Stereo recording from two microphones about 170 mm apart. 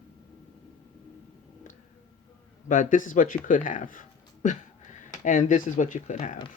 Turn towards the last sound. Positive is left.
turn(degrees=45)  # may be behind; listen again after turning